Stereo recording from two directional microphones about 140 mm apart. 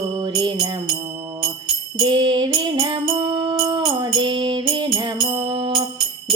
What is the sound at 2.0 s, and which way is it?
Music, 30° right (ahead or behind).